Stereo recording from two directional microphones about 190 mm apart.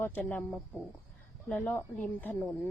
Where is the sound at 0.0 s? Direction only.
10° left (ahead or behind).